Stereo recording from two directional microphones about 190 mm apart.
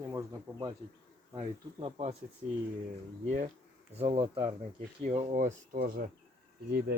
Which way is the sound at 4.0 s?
30° right (ahead or behind).